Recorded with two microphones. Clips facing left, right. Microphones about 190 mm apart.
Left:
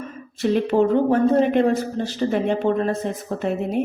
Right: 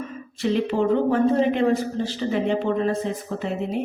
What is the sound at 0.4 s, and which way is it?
Speech, 45° left (ahead or behind).